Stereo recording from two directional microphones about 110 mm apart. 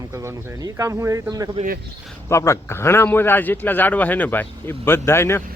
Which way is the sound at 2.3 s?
25° left (ahead or behind).